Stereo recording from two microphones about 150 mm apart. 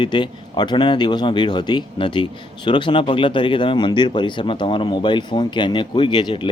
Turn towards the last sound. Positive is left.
turn(degrees=30)  # may be behind; listen again after turning